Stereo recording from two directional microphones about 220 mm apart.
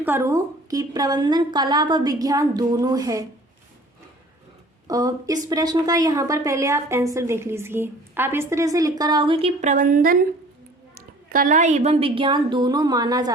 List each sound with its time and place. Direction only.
0.0 s a woman's voice: 10° right (ahead or behind)
4.9 s a woman's voice: 15° right (ahead or behind); by 10.2 s 40° right (ahead or behind)
11.3 s a woman's voice: 40° right (ahead or behind); by 13.3 s 15° right (ahead or behind)